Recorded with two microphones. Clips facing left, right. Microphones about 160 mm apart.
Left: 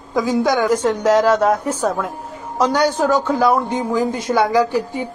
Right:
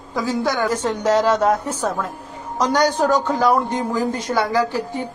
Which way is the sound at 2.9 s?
15° right (ahead or behind).